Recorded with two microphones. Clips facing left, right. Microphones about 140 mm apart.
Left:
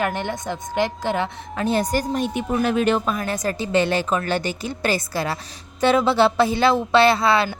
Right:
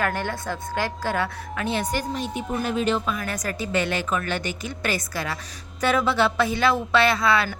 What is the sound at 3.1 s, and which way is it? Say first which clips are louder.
A woman's voice: left 5 dB; 30° left (ahead or behind).